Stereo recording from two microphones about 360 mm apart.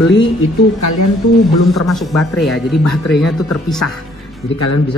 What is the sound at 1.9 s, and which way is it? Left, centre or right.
Speech, centre.